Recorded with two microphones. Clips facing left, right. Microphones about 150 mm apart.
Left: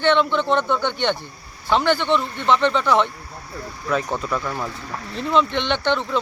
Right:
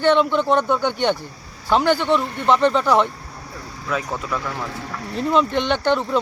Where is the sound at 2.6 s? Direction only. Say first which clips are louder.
Right 2 dB; 40° right (ahead or behind).